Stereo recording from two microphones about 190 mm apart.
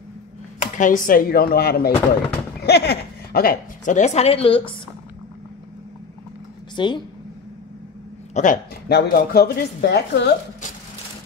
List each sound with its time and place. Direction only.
0.6 s a woman's voice: 40° left (ahead or behind)
6.7 s a sound: 25° left (ahead or behind)
8.3 s speech: 40° left (ahead or behind)
8.8 s a woman's voice: 55° left (ahead or behind)